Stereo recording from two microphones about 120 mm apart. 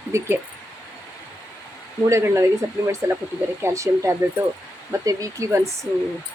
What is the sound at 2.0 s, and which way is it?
Speech, 25° right (ahead or behind).